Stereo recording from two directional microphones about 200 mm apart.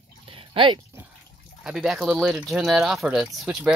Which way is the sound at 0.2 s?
25° right (ahead or behind).